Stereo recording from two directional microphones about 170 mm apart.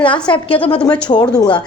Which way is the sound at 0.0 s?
30° left (ahead or behind).